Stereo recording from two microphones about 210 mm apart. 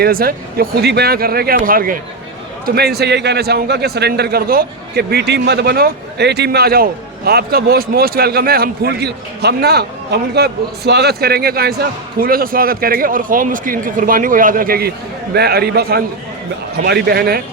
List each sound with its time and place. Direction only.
0.0 s a man's voice: 45° right (ahead or behind)